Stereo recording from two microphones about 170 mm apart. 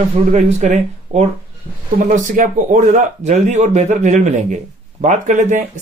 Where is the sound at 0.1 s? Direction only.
45° right (ahead or behind).